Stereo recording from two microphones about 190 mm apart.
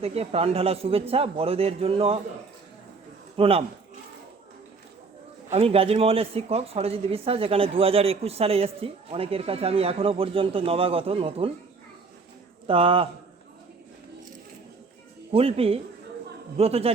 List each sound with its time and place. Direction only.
0.0 s speech: 35° right (ahead or behind)
3.3 s a man's voice: 30° right (ahead or behind)
5.5 s speech: 30° right (ahead or behind)
12.6 s a man's voice: 30° right (ahead or behind)
15.3 s speech: 30° right (ahead or behind)